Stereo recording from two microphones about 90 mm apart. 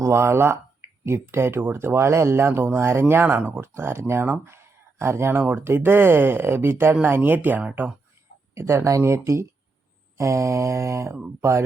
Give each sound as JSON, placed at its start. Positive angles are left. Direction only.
{"t": 0.0, "sound": "speech", "side_deg": -30}
{"t": 8.5, "sound": "mantra", "side_deg": -30}